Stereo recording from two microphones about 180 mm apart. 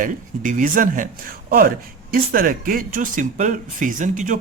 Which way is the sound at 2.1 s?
50° right (ahead or behind).